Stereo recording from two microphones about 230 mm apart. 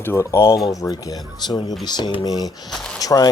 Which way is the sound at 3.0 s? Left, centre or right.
Centre.